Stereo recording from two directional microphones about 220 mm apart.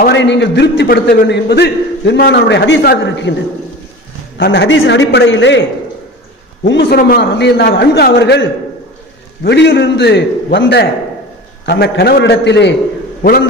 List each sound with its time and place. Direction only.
0.0 s a man's voice: 50° left (ahead or behind)
4.4 s a man's voice: 50° left (ahead or behind)
6.6 s a man's voice: 50° left (ahead or behind)